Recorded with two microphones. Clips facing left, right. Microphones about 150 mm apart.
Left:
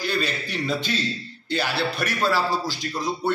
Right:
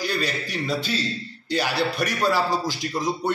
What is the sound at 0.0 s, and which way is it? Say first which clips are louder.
A man's voice: even; 10° right (ahead or behind).